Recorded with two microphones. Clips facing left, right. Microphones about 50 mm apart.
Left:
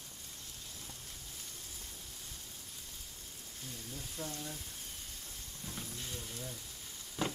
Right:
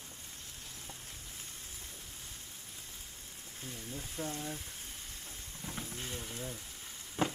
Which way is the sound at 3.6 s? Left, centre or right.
Right.